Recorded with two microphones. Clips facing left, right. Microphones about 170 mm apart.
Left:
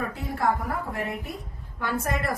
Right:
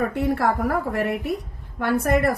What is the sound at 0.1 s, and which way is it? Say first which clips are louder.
A woman's voice: right 5 dB; 70° right (ahead or behind).